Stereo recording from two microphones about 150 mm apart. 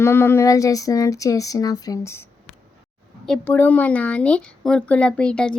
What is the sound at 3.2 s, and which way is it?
Speech, 10° left (ahead or behind).